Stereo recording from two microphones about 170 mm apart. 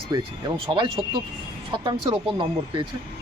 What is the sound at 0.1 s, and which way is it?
Speech, 25° right (ahead or behind).